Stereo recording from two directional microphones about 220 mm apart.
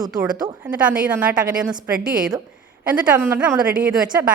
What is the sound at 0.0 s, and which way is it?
Speech, 15° right (ahead or behind).